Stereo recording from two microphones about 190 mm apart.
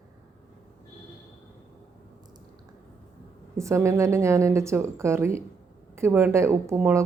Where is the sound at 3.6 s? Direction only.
15° right (ahead or behind).